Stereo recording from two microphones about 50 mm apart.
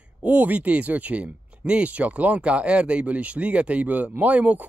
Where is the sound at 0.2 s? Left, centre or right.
Right.